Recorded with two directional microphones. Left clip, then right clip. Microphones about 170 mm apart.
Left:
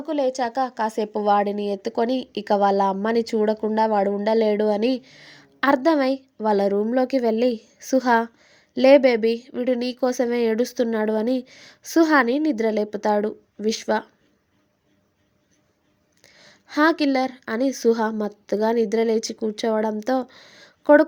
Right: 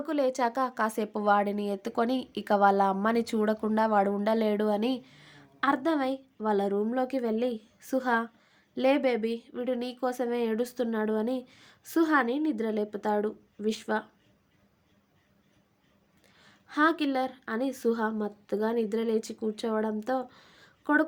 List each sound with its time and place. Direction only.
0.0 s a woman's voice: 5° left (ahead or behind); by 14.1 s 35° left (ahead or behind)
16.2 s speech: 40° left (ahead or behind)